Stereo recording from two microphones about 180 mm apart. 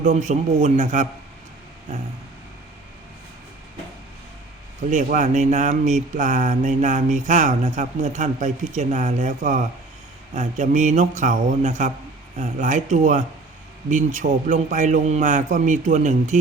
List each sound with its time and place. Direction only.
0.0 s a man's voice: 40° right (ahead or behind)
4.9 s speech: 45° right (ahead or behind)